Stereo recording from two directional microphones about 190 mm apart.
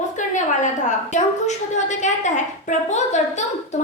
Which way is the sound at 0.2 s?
40° left (ahead or behind).